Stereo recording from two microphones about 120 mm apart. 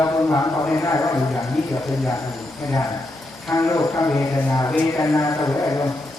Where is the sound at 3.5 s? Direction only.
25° left (ahead or behind).